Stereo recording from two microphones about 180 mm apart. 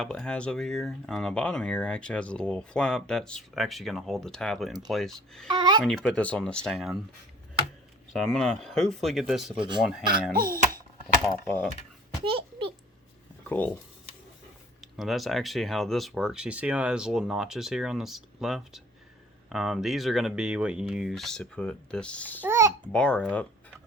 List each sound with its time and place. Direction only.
0.0 s speech: 5° left (ahead or behind)
5.5 s speech: 25° right (ahead or behind)
5.8 s speech: centre (ahead or behind)
8.1 s speech: centre (ahead or behind)
9.6 s speech: 25° right (ahead or behind)
9.8 s speech: centre (ahead or behind)
10.3 s a sound: 55° right (ahead or behind)
11.4 s speech: 10° left (ahead or behind)
12.2 s a sound: 30° right (ahead or behind)
13.6 s speech: 10° left (ahead or behind)
14.8 s speech: centre (ahead or behind)
22.4 s babbling: 15° right (ahead or behind)
22.9 s speech: 5° left (ahead or behind)